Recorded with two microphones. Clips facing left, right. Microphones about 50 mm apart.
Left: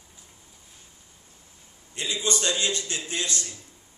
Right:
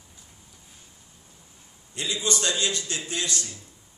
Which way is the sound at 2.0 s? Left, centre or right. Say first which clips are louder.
Even; left.